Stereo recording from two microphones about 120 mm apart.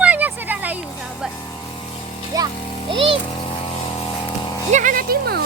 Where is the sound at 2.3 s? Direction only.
30° right (ahead or behind).